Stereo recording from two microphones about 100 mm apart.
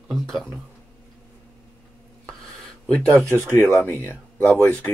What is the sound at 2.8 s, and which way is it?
Speech, 10° left (ahead or behind).